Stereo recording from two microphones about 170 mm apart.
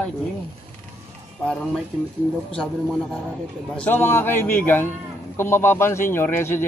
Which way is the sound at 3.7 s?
10° left (ahead or behind).